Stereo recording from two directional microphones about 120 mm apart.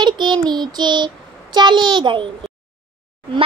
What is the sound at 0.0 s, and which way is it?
Child singing, 40° right (ahead or behind).